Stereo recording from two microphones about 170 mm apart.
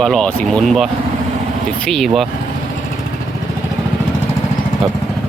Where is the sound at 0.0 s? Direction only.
5° left (ahead or behind).